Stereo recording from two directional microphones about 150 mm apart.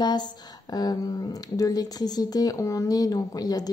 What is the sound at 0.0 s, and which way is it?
Speech, 30° left (ahead or behind).